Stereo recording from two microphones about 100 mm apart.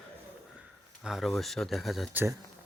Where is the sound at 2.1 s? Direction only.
20° right (ahead or behind).